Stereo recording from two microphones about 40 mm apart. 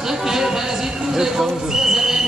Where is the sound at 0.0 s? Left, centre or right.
Centre.